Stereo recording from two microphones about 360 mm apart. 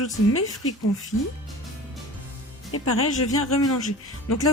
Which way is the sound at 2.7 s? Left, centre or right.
Left.